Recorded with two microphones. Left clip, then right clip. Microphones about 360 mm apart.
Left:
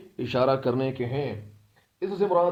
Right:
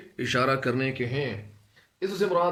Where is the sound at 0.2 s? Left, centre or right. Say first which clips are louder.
Left 1 dB; centre.